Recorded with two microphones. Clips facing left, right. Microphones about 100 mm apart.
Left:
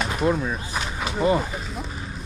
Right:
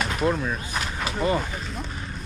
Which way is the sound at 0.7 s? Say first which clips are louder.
Left 1 dB; centre (ahead or behind).